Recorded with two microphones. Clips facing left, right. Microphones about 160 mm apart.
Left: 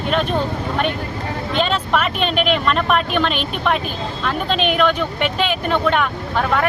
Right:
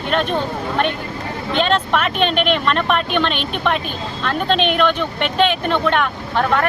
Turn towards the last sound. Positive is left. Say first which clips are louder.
# right 1 dB
turn(degrees=5)  # may be behind; listen again after turning